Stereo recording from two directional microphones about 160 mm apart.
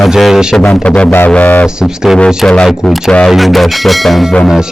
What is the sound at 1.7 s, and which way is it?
Speech, 5° right (ahead or behind).